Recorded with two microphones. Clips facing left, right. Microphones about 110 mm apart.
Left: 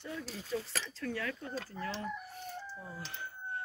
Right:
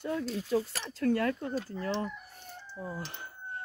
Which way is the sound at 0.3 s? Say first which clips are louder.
Right 7 dB; 60° right (ahead or behind).